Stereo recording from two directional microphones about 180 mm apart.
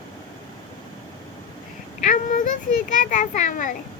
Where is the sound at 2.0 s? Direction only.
45° left (ahead or behind).